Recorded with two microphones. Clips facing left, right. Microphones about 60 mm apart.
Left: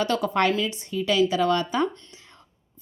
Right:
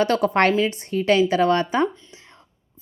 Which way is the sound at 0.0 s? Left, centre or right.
Right.